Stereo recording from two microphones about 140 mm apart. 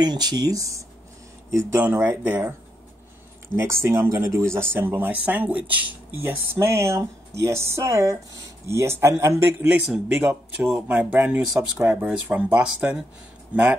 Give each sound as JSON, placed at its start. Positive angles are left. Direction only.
{"t": 0.0, "sound": "speech", "side_deg": -30}
{"t": 3.5, "sound": "speech", "side_deg": -20}